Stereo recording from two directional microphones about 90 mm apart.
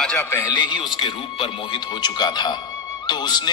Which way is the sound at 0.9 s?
75° left (ahead or behind).